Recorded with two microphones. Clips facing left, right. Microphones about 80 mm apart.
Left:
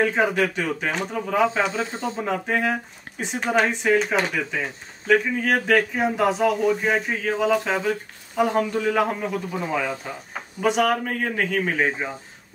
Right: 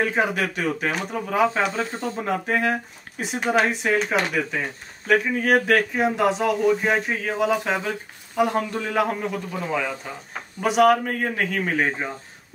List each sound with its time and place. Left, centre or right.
0.0 s speech: centre
1.8 s speech: centre
2.2 s speech: centre